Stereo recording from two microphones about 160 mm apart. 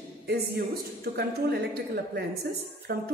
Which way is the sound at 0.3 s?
75° right (ahead or behind).